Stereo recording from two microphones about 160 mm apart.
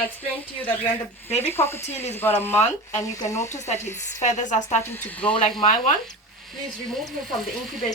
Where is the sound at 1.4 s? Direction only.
15° left (ahead or behind).